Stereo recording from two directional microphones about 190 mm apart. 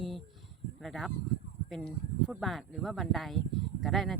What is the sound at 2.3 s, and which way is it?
Speech, centre (ahead or behind).